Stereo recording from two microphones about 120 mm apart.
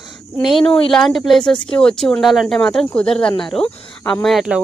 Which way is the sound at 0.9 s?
Centre (ahead or behind).